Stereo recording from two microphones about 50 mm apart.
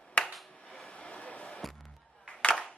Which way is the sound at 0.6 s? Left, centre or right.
Centre.